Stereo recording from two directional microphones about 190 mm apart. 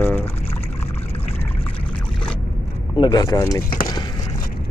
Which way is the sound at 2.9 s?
20° left (ahead or behind).